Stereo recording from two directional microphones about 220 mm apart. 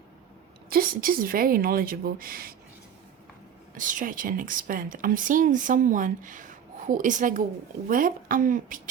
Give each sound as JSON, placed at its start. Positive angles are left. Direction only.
{"t": 0.7, "sound": "speech", "side_deg": -40}
{"t": 3.8, "sound": "speech", "side_deg": -35}